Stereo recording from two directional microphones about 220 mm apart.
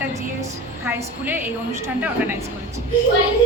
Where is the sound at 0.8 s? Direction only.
10° right (ahead or behind).